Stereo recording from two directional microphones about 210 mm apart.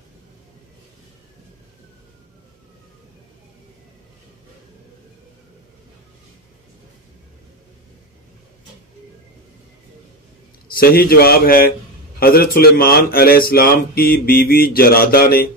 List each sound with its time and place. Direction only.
10.7 s mantra: 45° left (ahead or behind)